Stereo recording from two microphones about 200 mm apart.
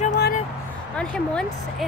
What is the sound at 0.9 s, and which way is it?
Speech, 5° left (ahead or behind).